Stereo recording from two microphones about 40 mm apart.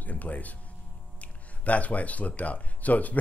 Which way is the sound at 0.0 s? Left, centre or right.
Left.